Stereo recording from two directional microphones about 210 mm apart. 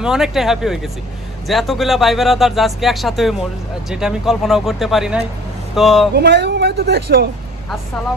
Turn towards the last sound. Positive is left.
turn(degrees=-50)  # may be behind; listen again after turning